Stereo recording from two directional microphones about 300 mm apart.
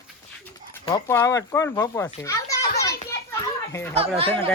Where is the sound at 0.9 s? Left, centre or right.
Centre.